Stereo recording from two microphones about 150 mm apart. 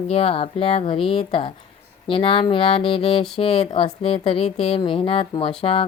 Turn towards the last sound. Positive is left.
turn(degrees=40)  # may be behind; listen again after turning